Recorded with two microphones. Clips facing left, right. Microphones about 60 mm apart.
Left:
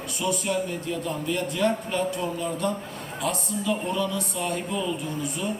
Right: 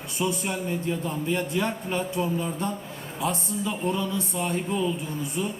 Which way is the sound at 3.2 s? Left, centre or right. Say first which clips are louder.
Even; right.